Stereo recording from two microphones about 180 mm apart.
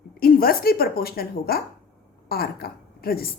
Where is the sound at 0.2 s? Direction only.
55° left (ahead or behind).